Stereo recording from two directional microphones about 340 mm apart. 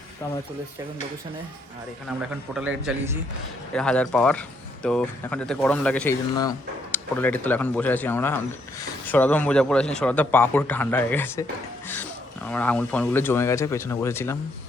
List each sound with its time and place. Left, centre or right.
2.6 s speech: centre
12.5 s speech: centre